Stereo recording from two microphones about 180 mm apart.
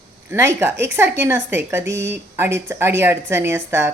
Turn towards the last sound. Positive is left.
turn(degrees=-15)  # may be behind; listen again after turning